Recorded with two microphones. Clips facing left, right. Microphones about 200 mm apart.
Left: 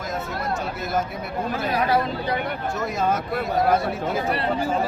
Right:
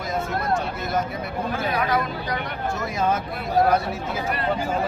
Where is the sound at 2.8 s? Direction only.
Centre (ahead or behind).